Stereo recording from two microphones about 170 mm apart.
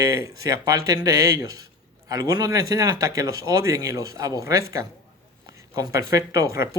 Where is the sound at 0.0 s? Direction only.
20° right (ahead or behind).